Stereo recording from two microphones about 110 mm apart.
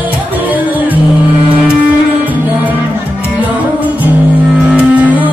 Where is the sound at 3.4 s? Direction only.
15° right (ahead or behind).